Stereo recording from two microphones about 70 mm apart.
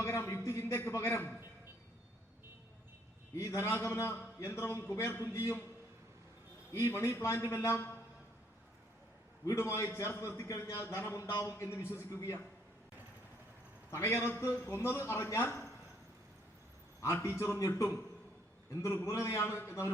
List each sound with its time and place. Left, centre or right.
0.0 s a sound: left
3.3 s a man's voice: left
6.7 s speech: left
9.5 s a man's voice: left
11.5 s a man's voice: left
13.9 s a man's voice: left
17.2 s a man's voice: left
17.6 s speech: left
19.0 s a man's voice: left